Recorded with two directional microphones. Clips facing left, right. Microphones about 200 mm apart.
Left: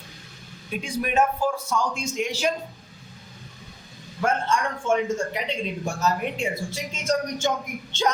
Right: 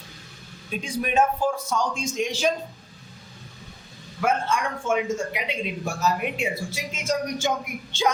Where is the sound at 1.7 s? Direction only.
20° right (ahead or behind).